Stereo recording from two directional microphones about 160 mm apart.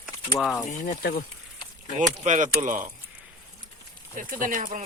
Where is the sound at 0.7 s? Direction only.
55° left (ahead or behind).